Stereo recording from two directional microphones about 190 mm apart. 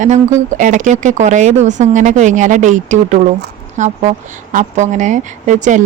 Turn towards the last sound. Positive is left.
turn(degrees=-40)  # may be behind; listen again after turning